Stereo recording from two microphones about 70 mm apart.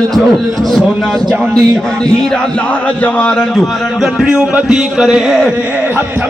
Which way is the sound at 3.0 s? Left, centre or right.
Left.